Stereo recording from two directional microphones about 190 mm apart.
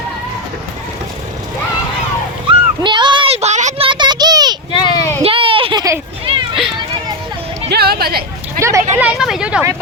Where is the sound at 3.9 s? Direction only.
25° right (ahead or behind).